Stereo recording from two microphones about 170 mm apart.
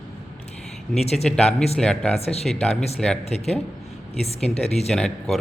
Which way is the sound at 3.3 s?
40° left (ahead or behind).